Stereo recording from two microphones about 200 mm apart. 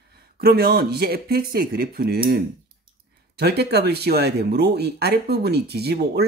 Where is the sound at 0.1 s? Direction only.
50° right (ahead or behind).